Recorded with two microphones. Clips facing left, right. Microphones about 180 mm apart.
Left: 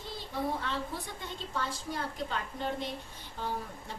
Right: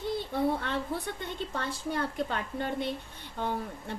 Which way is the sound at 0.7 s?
60° right (ahead or behind).